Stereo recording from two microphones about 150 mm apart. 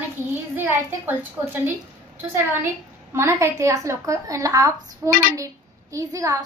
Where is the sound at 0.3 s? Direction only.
15° right (ahead or behind).